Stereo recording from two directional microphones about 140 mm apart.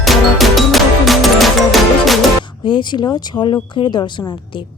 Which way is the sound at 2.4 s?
35° left (ahead or behind).